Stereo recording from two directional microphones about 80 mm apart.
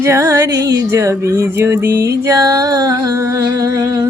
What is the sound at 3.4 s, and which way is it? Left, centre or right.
Humming, right.